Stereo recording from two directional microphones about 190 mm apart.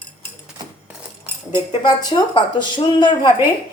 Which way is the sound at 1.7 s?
25° left (ahead or behind).